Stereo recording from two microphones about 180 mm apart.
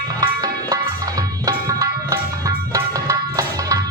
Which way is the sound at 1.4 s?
20° right (ahead or behind).